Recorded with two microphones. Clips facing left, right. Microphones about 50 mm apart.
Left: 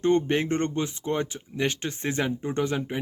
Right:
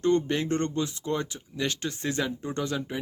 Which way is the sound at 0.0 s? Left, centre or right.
Left.